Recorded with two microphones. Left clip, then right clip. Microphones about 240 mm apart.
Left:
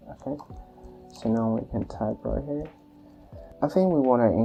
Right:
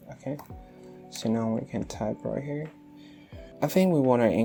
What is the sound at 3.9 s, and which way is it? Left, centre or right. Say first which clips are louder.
Speech: left 1 dB; right.